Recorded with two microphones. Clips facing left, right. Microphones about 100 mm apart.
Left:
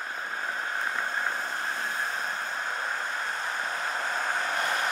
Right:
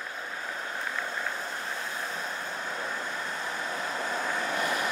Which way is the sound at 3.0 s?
35° left (ahead or behind).